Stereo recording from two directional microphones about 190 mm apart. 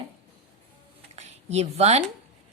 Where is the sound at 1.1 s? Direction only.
35° right (ahead or behind).